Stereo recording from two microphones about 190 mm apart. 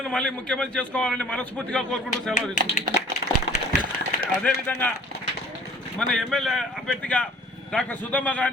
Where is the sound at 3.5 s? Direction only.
65° left (ahead or behind).